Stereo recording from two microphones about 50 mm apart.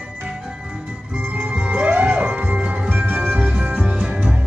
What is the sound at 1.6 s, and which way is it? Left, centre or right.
Music, right.